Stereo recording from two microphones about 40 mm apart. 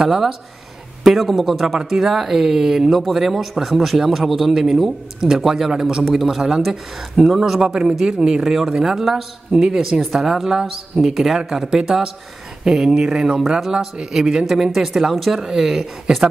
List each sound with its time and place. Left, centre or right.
0.0 s a man's voice: centre